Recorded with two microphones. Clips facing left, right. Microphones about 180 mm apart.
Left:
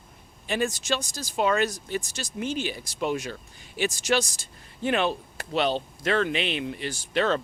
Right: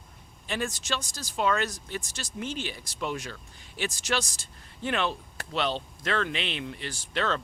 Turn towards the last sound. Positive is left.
turn(degrees=10)  # may be behind; listen again after turning